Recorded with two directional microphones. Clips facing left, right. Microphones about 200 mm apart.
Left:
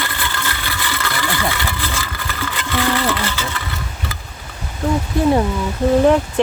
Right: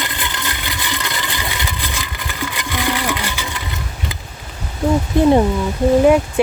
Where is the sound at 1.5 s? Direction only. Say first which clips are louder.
Left 2 dB; 15° right (ahead or behind).